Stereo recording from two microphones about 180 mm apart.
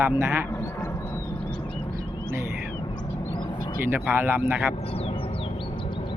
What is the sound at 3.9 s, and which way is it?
Speech, 10° right (ahead or behind).